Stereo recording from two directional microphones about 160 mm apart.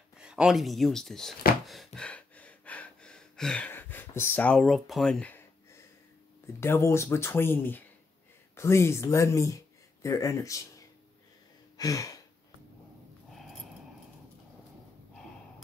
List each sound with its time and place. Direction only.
0.2 s speech: 5° right (ahead or behind)
1.7 s gasp: 5° left (ahead or behind)
6.4 s speech: 15° left (ahead or behind)
11.7 s a sound: 20° left (ahead or behind)
13.3 s dog: centre (ahead or behind)